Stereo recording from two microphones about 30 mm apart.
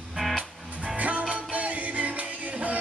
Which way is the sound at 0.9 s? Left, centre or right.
Right.